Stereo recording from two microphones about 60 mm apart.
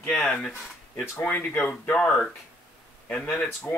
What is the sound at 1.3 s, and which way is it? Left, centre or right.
Speech, left.